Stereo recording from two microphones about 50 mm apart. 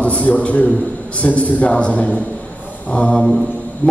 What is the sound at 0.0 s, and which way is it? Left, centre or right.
A man's voice, left.